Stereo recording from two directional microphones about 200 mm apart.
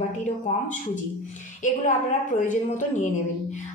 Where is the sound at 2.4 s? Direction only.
40° left (ahead or behind).